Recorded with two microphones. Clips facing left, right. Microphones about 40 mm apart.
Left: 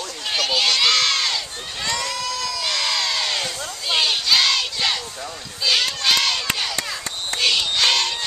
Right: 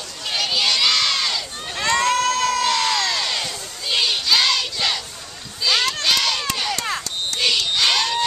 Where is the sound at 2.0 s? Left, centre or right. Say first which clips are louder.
Right 8 dB; right.